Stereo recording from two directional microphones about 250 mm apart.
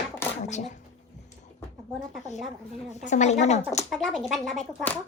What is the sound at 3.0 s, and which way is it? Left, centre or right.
Speech, left.